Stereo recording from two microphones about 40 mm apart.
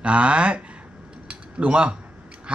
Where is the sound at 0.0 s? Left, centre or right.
Right.